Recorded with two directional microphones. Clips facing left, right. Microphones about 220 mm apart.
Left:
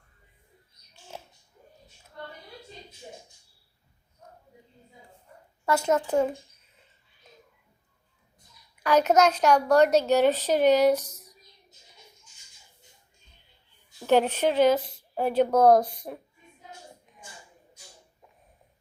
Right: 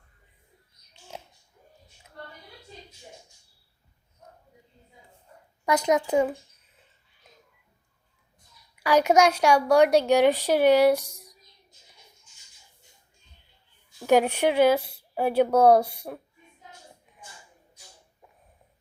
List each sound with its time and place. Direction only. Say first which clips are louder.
5.6 s a woman's voice: right 1 dB; 15° right (ahead or behind)
8.8 s a woman's voice: right 1 dB; 10° right (ahead or behind)
14.1 s a woman's voice: right 1 dB; 10° right (ahead or behind)